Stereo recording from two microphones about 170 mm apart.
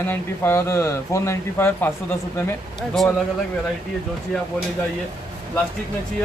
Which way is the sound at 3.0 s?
Centre (ahead or behind).